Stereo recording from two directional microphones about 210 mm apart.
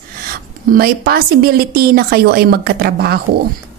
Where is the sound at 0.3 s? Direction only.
45° right (ahead or behind).